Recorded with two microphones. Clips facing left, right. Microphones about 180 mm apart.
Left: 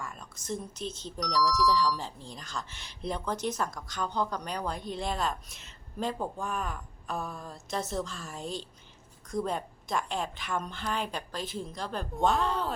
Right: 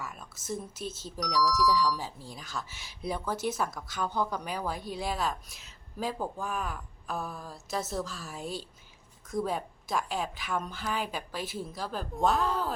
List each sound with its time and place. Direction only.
0.0 s speech: 5° right (ahead or behind)